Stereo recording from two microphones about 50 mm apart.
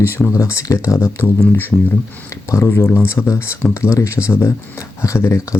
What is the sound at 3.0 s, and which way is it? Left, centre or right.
Speech, left.